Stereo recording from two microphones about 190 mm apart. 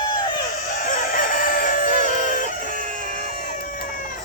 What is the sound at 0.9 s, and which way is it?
Chicken, 45° left (ahead or behind).